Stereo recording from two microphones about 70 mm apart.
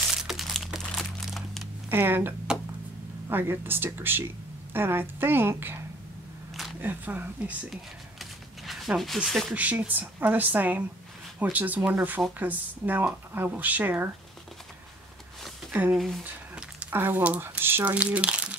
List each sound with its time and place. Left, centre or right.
0.1 s crumpling: centre
1.9 s a woman's voice: right
7.7 s a sound: centre
9.5 s speech: right
15.7 s a woman's voice: right
17.9 s speech: centre